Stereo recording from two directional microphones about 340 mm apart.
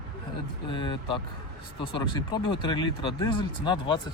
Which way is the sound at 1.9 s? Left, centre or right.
Centre.